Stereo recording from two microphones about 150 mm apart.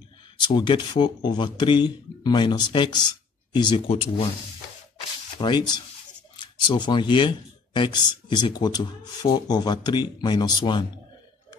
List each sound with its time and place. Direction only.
0.4 s speech: 30° left (ahead or behind)
5.4 s speech: 30° left (ahead or behind)